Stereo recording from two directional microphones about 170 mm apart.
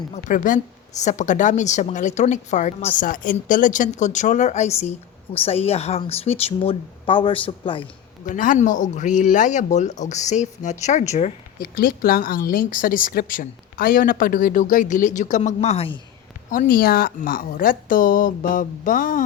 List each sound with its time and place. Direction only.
0.1 s a woman's voice: 50° left (ahead or behind); by 7.9 s 30° left (ahead or behind)
8.2 s a woman's voice: 50° left (ahead or behind)
11.8 s a woman's voice: 60° left (ahead or behind); by 16.0 s 35° left (ahead or behind)
16.5 s a woman's voice: 55° left (ahead or behind)